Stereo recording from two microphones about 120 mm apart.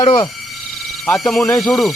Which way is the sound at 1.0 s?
5° left (ahead or behind).